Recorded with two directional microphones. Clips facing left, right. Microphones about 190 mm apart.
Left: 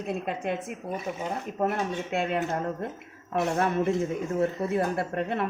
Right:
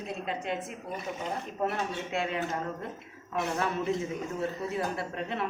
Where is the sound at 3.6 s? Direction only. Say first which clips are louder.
Left 5 dB; 55° left (ahead or behind).